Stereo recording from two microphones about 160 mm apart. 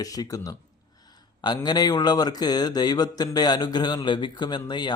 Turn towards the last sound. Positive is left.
turn(degrees=25)  # may be behind; listen again after turning